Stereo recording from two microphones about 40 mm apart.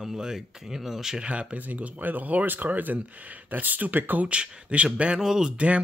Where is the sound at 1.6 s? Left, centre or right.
Right.